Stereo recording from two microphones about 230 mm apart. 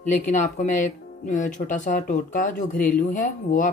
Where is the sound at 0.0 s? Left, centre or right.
Left.